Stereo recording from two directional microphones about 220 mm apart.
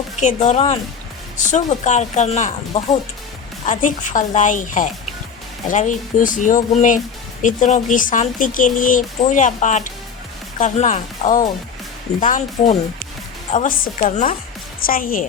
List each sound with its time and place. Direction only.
0.2 s speech: 30° left (ahead or behind)
13.5 s speech: 35° left (ahead or behind)